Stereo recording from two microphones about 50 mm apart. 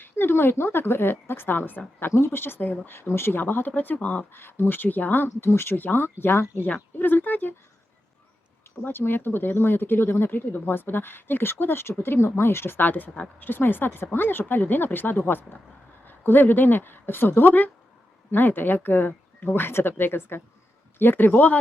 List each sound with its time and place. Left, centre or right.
0.0 s speech: left
2.1 s speech: left
3.4 s speech: left
3.9 s speech: left
4.4 s speech: left
5.7 s speech: left
8.8 s speech: left